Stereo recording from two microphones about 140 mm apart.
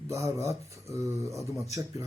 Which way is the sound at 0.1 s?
20° right (ahead or behind).